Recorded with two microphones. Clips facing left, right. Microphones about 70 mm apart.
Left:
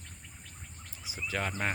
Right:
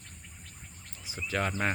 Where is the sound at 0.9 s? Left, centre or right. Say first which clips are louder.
Right 2 dB; centre.